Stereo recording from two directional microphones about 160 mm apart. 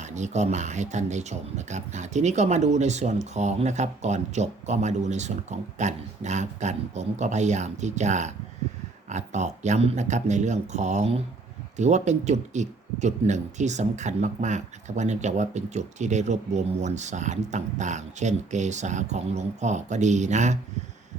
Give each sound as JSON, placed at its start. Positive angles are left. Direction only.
{"t": 0.0, "sound": "speech", "side_deg": -45}